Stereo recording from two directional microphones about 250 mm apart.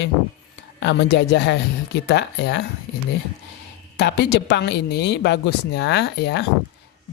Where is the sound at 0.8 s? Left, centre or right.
Left.